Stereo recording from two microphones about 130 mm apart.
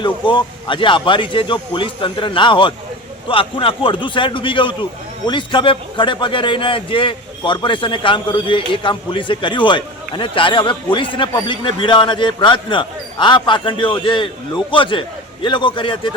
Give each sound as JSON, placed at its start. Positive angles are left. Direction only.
{"t": 0.0, "sound": "a man's voice", "side_deg": 40}